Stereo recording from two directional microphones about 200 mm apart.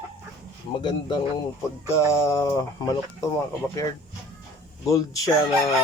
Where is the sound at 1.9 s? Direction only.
15° left (ahead or behind).